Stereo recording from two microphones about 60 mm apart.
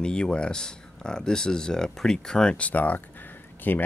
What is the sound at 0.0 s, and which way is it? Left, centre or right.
Speech, centre.